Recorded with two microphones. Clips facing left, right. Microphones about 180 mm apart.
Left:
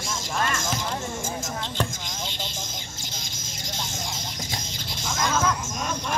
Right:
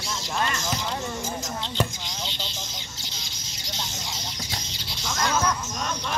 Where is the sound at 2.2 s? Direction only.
50° left (ahead or behind).